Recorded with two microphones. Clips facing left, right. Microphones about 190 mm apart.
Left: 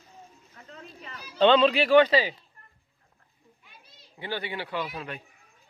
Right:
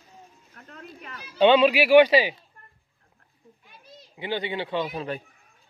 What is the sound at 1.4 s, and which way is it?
Speech, 10° right (ahead or behind).